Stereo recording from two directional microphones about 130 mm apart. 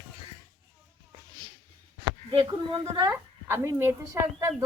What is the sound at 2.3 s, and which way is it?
Speech, 40° right (ahead or behind).